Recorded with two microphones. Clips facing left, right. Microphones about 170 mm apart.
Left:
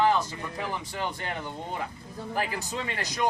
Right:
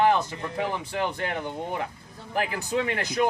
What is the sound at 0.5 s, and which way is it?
Speech, 60° right (ahead or behind).